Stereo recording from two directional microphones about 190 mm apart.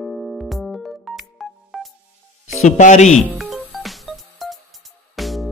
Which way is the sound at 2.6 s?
40° left (ahead or behind).